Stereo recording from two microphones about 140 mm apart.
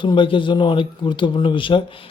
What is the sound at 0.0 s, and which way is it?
Speech, 35° left (ahead or behind).